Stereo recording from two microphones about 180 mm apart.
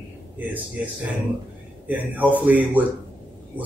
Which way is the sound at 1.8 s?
10° right (ahead or behind).